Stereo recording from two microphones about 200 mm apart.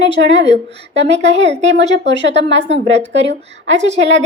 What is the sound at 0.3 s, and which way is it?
Speech, 60° right (ahead or behind).